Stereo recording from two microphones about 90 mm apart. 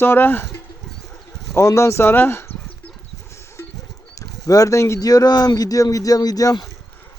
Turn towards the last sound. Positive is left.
turn(degrees=45)  # may be behind; listen again after turning